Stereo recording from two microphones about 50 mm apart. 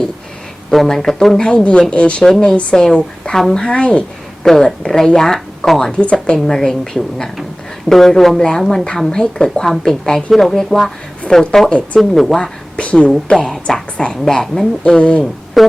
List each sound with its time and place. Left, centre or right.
0.7 s a woman's voice: centre; by 4.0 s left
4.4 s speech: centre
12.7 s a sound: left
13.3 s speech: centre
13.7 s speech: centre
14.9 s a woman's voice: left
15.6 s speech: centre